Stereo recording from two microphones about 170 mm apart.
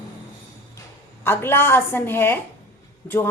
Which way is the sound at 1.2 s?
15° left (ahead or behind).